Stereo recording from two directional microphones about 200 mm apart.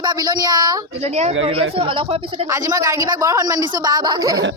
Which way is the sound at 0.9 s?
30° right (ahead or behind).